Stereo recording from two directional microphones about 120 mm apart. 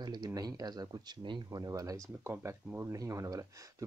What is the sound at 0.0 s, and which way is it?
Speech, 35° right (ahead or behind).